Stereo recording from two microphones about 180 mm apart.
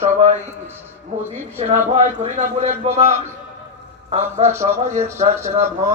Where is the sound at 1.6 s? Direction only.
40° right (ahead or behind).